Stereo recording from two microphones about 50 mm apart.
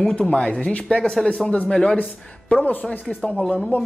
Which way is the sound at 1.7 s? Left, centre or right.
Centre.